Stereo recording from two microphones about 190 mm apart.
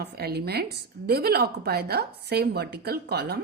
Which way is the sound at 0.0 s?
55° right (ahead or behind).